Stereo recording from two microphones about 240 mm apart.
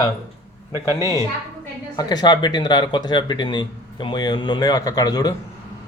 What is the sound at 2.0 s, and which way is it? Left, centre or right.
Speech, centre.